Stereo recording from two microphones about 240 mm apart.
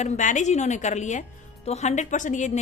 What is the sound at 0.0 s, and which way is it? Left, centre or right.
A woman's voice, left.